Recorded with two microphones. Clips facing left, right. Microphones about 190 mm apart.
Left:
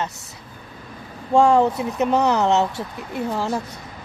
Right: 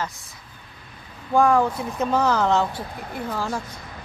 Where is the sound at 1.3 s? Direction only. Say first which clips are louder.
Left 3 dB; 25° left (ahead or behind).